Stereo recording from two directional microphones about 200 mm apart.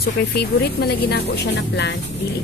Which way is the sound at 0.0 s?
50° left (ahead or behind).